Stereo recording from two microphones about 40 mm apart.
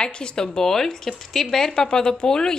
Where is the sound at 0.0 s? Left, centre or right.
Left.